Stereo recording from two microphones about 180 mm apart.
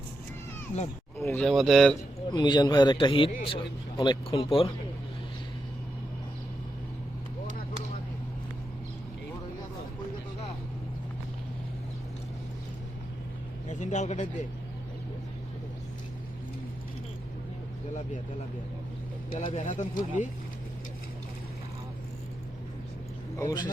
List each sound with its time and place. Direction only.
1.3 s speech: 5° left (ahead or behind)
2.3 s a man's voice: 25° left (ahead or behind)
13.7 s speech: 40° left (ahead or behind)
19.3 s speech: 30° left (ahead or behind)
19.6 s speech: 45° left (ahead or behind)
23.4 s speech: 20° left (ahead or behind)